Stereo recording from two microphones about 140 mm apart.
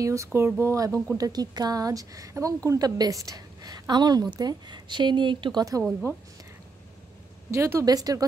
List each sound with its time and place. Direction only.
0.0 s a woman's voice: 20° right (ahead or behind)
7.5 s a woman's voice: 20° right (ahead or behind)